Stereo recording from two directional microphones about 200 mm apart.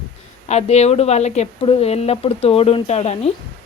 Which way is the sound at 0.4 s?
35° left (ahead or behind).